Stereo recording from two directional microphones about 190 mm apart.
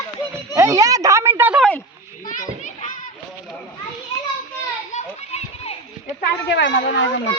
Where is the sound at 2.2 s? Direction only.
45° left (ahead or behind).